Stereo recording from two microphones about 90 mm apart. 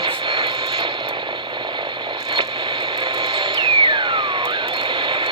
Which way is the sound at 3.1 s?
50° right (ahead or behind).